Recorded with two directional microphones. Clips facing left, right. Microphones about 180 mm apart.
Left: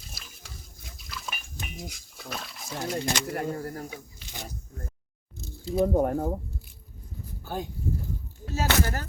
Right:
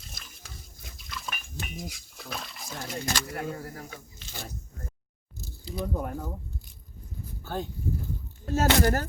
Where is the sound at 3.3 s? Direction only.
35° left (ahead or behind).